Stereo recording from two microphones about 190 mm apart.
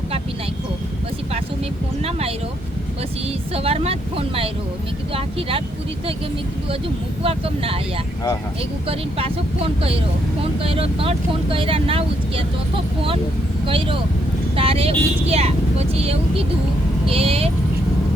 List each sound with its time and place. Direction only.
2.0 s speech: 30° right (ahead or behind)
3.5 s speech: 30° right (ahead or behind)
7.2 s speech: 30° right (ahead or behind)
8.9 s speech: 30° right (ahead or behind)
13.7 s speech: 25° right (ahead or behind)